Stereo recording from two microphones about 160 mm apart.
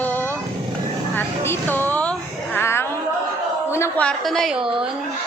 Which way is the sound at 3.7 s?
15° left (ahead or behind).